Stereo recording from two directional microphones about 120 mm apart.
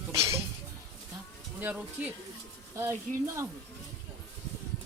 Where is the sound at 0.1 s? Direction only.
25° right (ahead or behind).